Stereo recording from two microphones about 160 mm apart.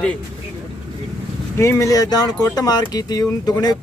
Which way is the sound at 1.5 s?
15° left (ahead or behind).